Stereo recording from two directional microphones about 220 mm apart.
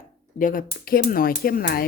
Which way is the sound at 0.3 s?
40° left (ahead or behind).